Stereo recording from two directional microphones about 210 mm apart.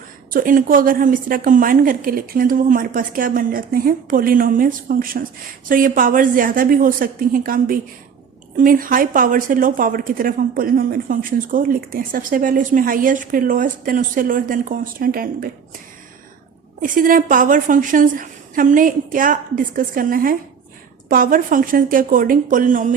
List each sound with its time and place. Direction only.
0.3 s a woman's voice: 40° right (ahead or behind)
16.8 s a woman's voice: 40° right (ahead or behind)